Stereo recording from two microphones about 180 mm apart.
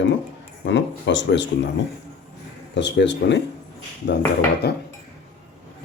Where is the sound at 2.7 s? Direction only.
80° left.